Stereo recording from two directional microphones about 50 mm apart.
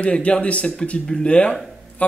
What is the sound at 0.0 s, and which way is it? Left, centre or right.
Speech, left.